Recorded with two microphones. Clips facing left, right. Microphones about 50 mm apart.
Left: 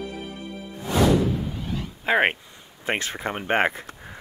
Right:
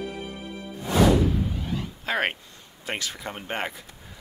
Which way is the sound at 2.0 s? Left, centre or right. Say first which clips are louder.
Left 6 dB; left.